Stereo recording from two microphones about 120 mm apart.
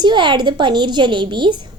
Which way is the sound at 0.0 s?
40° right (ahead or behind).